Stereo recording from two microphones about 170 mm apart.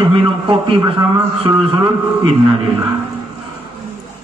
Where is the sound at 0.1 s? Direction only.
30° right (ahead or behind).